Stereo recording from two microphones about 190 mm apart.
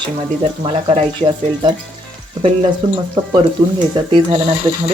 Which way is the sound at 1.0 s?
25° right (ahead or behind).